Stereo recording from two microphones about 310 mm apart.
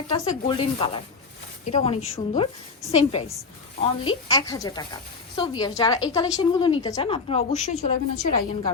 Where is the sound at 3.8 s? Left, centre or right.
Centre.